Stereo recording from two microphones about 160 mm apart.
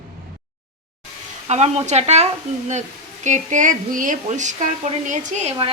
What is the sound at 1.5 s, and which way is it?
Speech, 45° right (ahead or behind).